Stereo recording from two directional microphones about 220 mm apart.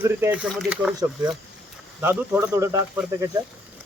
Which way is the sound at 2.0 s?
10° right (ahead or behind).